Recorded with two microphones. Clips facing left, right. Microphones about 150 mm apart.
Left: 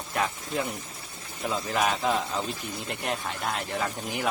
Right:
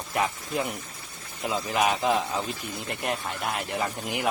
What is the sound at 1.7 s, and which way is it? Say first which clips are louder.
Speech: right 2 dB; 15° right (ahead or behind).